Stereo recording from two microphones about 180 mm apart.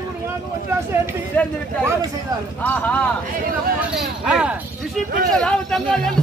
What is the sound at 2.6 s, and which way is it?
Speech, 10° left (ahead or behind).